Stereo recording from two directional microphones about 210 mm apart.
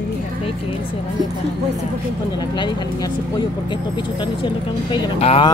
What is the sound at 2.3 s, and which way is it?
Speech, 20° left (ahead or behind).